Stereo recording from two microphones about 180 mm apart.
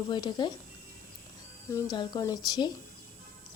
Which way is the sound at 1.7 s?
25° left (ahead or behind).